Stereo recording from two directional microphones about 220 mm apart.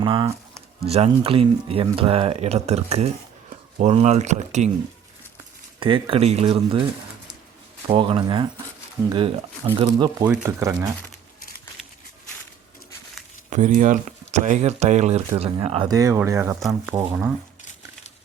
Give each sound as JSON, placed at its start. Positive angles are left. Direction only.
{"t": 0.0, "sound": "speech", "side_deg": -25}
{"t": 5.8, "sound": "speech", "side_deg": -25}
{"t": 7.9, "sound": "speech", "side_deg": -25}
{"t": 10.2, "sound": "speech", "side_deg": -10}
{"t": 13.5, "sound": "speech", "side_deg": -35}
{"t": 16.6, "sound": "speech", "side_deg": 0}
{"t": 16.9, "sound": "speech", "side_deg": -15}